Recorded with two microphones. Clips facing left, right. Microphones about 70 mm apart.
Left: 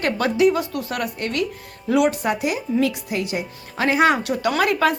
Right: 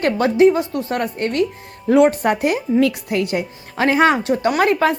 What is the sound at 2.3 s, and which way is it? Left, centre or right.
A woman's voice, right.